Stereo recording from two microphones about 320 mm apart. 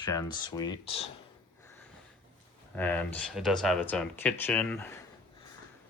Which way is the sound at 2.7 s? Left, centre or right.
Centre.